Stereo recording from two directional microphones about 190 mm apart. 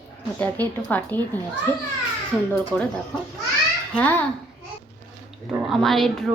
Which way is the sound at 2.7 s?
10° left (ahead or behind).